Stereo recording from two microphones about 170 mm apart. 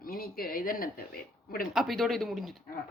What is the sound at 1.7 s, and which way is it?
Speech, centre (ahead or behind).